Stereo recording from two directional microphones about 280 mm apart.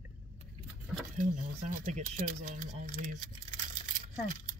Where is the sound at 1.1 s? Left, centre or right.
Right.